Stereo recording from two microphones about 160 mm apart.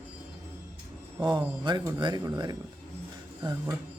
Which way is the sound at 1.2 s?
30° right (ahead or behind).